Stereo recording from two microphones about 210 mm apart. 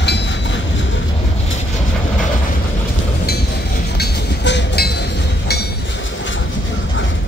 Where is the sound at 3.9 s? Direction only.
55° left (ahead or behind).